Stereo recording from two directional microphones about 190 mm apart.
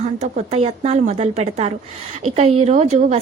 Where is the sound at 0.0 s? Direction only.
35° right (ahead or behind).